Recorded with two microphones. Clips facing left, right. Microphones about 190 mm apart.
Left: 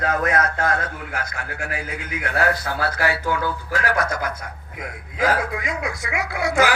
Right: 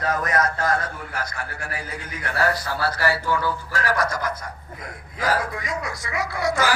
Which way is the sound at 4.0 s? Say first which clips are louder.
Even; 60° left (ahead or behind).